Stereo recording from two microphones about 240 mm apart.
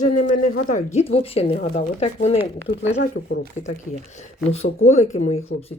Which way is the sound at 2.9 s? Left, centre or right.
Left.